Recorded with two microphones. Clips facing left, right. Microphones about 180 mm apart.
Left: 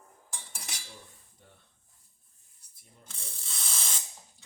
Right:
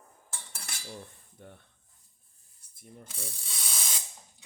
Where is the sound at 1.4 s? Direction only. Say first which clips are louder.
Right 10 dB; 60° right (ahead or behind).